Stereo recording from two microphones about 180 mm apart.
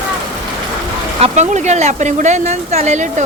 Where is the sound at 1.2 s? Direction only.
40° right (ahead or behind).